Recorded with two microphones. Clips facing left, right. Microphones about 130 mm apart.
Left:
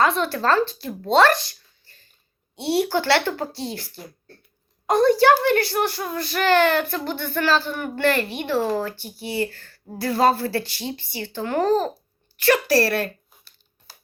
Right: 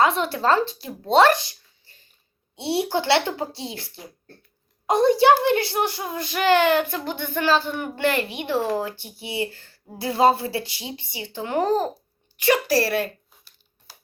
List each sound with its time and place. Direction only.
0.0 s speech: 20° right (ahead or behind)
3.7 s speech: 50° left (ahead or behind)
4.9 s speech: 20° right (ahead or behind)
12.4 s a sound: 15° right (ahead or behind)